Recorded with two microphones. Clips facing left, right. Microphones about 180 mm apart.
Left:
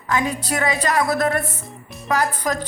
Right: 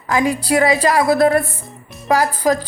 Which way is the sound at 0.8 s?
30° right (ahead or behind).